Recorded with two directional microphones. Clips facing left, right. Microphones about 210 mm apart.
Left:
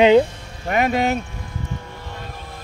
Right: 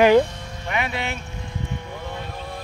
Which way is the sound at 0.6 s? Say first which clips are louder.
Left 8 dB; 45° left (ahead or behind).